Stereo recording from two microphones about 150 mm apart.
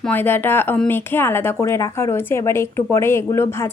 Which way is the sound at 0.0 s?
10° left (ahead or behind).